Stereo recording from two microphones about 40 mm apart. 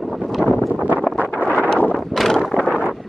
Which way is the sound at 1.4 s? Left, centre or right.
Left.